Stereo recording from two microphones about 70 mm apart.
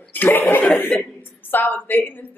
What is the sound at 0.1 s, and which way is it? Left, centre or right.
Chuckle, left.